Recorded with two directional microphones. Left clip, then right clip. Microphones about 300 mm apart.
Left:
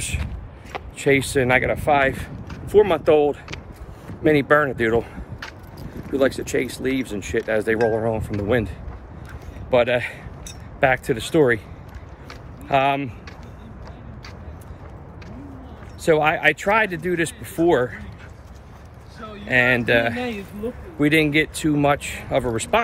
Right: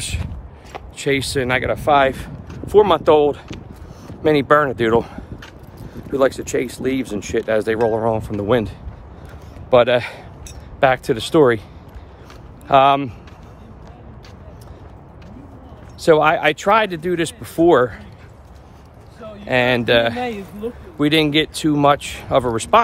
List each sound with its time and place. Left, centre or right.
0.7 s a man's voice: centre
12.6 s speech: centre
16.0 s speech: centre
19.2 s speech: centre
20.2 s speech: right
21.0 s speech: centre